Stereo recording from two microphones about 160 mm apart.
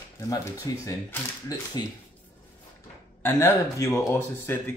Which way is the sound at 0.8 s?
20° left (ahead or behind).